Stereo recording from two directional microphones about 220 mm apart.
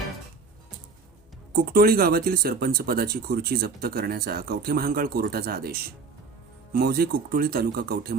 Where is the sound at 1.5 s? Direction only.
45° right (ahead or behind).